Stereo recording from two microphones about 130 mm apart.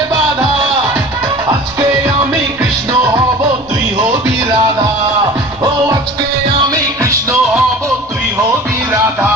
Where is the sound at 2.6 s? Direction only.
25° right (ahead or behind).